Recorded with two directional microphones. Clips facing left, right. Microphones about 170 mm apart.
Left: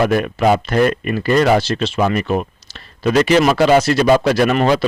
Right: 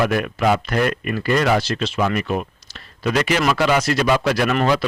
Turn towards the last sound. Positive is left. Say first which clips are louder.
# left 4 dB
turn(degrees=25)  # may be behind; listen again after turning